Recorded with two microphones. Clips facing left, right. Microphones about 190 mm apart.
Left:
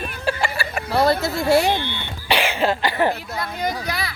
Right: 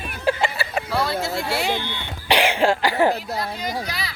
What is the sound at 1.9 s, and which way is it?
Cough, 15° right (ahead or behind).